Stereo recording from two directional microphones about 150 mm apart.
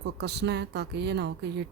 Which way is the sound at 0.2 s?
90° right.